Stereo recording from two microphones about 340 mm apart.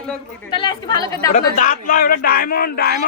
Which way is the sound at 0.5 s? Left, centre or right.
Centre.